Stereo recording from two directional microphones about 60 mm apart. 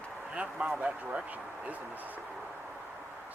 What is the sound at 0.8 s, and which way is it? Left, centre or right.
Speech, right.